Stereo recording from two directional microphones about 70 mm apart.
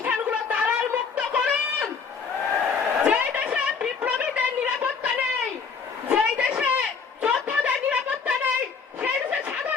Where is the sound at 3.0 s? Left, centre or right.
Centre.